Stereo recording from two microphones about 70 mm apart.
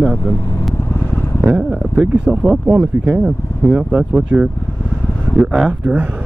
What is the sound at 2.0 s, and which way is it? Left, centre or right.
Speech, centre.